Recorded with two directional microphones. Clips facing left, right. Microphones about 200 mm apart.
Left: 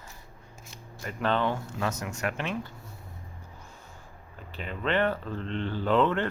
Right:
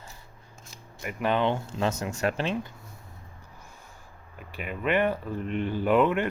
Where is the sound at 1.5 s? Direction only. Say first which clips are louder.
Right 3 dB; 25° right (ahead or behind).